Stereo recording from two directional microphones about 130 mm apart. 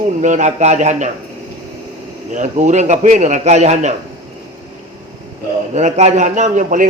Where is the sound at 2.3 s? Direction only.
70° right (ahead or behind).